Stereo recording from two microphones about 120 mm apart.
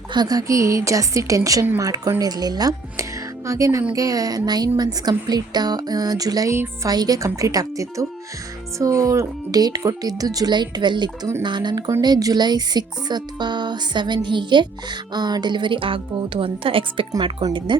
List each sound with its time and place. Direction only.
0.1 s speech: 35° right (ahead or behind)
17.1 s speech: 35° right (ahead or behind)